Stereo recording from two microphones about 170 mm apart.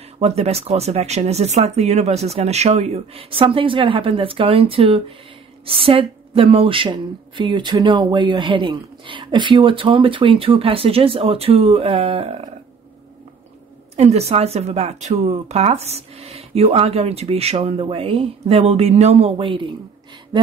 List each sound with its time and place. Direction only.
0.2 s a woman's voice: 35° right (ahead or behind)
13.9 s a woman's voice: 40° right (ahead or behind)